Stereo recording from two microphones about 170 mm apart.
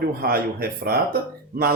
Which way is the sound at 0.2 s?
60° right (ahead or behind).